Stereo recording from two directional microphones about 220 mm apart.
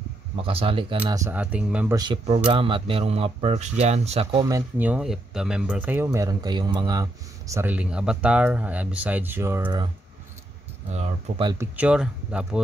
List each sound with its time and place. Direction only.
0.4 s speech: 25° right (ahead or behind); by 2.0 s 5° right (ahead or behind)
2.0 s speech: 25° right (ahead or behind)
10.9 s speech: 30° right (ahead or behind)
11.5 s speech: 10° right (ahead or behind)